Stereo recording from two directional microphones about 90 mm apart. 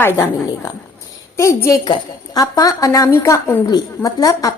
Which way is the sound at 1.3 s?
30° left (ahead or behind).